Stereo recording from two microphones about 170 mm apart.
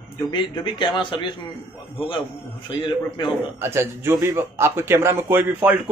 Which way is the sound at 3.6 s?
15° right (ahead or behind).